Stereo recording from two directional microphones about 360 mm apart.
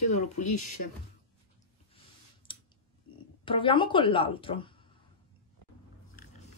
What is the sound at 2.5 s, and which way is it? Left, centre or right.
Clicking, centre.